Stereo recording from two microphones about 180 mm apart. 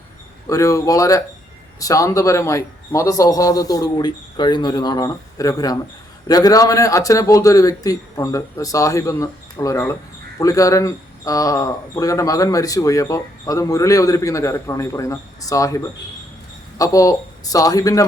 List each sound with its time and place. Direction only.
0.4 s speech: 20° left (ahead or behind)